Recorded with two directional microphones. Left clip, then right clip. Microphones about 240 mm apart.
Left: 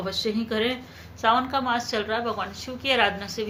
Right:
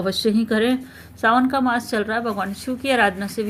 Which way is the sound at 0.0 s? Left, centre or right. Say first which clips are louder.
Right 6 dB; right.